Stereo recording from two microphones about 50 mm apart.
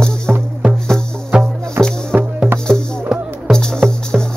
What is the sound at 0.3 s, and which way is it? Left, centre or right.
Music, centre.